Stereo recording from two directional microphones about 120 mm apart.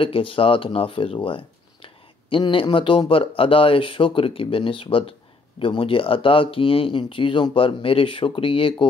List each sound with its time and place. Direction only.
0.0 s speech: 50° left (ahead or behind)